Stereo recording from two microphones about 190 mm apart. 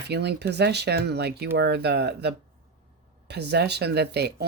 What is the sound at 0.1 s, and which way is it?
Speech, 60° right (ahead or behind).